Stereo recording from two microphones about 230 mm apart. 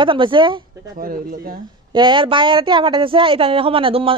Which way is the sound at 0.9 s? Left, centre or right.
Right.